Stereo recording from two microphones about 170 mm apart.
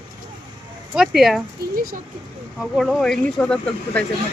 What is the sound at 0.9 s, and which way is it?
Speech, centre (ahead or behind).